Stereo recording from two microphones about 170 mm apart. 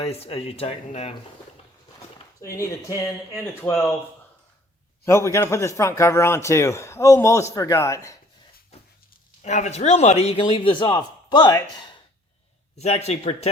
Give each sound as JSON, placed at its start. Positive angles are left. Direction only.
{"t": 0.0, "sound": "a man's voice", "side_deg": 35}
{"t": 2.4, "sound": "speech", "side_deg": 20}
{"t": 3.7, "sound": "speech", "side_deg": 0}
{"t": 5.0, "sound": "speech", "side_deg": 15}
{"t": 9.4, "sound": "a man's voice", "side_deg": 45}
{"t": 12.7, "sound": "a man's voice", "side_deg": 40}